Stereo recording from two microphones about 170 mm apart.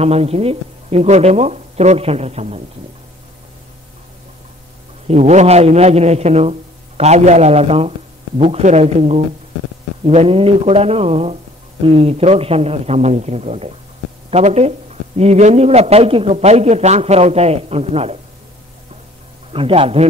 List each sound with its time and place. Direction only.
0.0 s speech: 35° right (ahead or behind)
5.0 s speech: 40° right (ahead or behind)
19.5 s speech: 35° right (ahead or behind)